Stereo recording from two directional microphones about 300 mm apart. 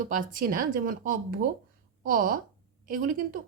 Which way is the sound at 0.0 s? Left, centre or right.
Right.